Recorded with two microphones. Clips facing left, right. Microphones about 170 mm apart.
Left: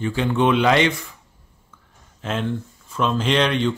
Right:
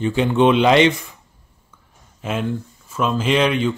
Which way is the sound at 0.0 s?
20° right (ahead or behind).